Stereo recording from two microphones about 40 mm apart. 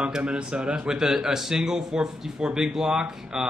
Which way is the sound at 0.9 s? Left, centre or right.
Centre.